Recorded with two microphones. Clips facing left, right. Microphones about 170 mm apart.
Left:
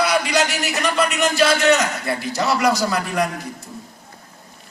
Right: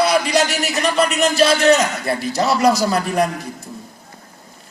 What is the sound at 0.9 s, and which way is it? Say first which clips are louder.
A man's voice: right 3 dB; 30° right (ahead or behind).